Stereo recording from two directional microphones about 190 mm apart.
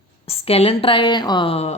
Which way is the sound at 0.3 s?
30° left (ahead or behind).